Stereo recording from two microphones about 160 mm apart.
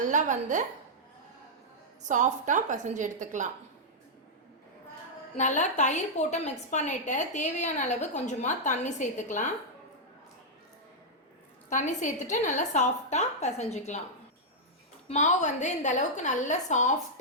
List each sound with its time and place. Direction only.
0.1 s a woman's voice: 50° right (ahead or behind)
2.0 s a woman's voice: 50° right (ahead or behind)
5.4 s a woman's voice: 50° left (ahead or behind)
11.7 s a woman's voice: 50° left (ahead or behind)
15.1 s a woman's voice: 45° left (ahead or behind)